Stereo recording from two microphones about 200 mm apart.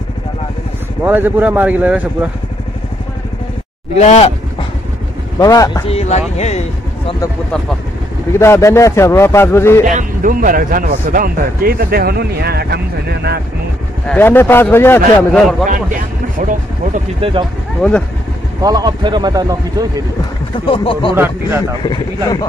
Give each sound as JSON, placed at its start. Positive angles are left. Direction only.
{"t": 1.0, "sound": "speech", "side_deg": -10}
{"t": 4.0, "sound": "speech", "side_deg": 35}
{"t": 5.4, "sound": "speech", "side_deg": 20}
{"t": 5.9, "sound": "speech", "side_deg": 35}
{"t": 8.3, "sound": "a man's voice", "side_deg": 15}
{"t": 9.8, "sound": "a man's voice", "side_deg": -40}
{"t": 14.0, "sound": "a man's voice", "side_deg": 10}
{"t": 16.9, "sound": "speech", "side_deg": -25}
{"t": 17.8, "sound": "speech", "side_deg": 5}
{"t": 18.6, "sound": "speech", "side_deg": -20}
{"t": 20.6, "sound": "speech", "side_deg": 25}
{"t": 21.1, "sound": "speech", "side_deg": -10}
{"t": 21.8, "sound": "speech", "side_deg": 20}